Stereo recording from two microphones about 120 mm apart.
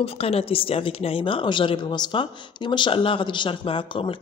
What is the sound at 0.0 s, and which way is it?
A woman's voice, 55° left (ahead or behind).